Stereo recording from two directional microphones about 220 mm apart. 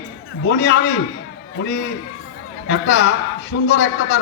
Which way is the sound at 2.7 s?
55° left (ahead or behind).